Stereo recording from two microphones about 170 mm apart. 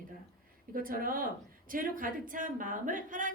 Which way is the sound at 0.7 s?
55° right (ahead or behind).